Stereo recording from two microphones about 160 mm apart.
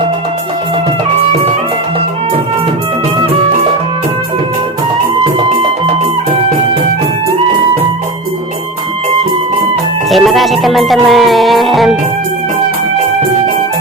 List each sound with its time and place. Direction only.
10.1 s music: centre (ahead or behind)